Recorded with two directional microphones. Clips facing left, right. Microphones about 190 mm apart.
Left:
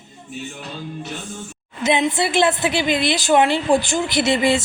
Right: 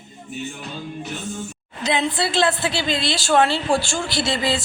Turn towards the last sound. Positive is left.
turn(degrees=20)  # may be behind; listen again after turning